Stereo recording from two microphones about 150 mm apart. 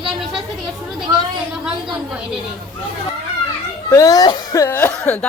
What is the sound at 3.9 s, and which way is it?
Speech, 20° left (ahead or behind).